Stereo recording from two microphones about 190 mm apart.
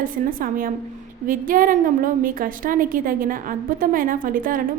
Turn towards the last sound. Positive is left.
turn(degrees=-45)  # may be behind; listen again after turning